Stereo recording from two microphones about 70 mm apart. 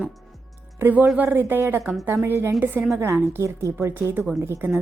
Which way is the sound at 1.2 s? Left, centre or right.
Right.